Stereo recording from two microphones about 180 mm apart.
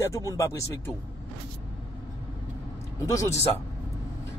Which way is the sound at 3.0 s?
15° left (ahead or behind).